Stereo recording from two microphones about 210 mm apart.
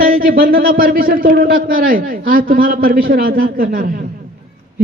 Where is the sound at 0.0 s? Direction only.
45° right (ahead or behind).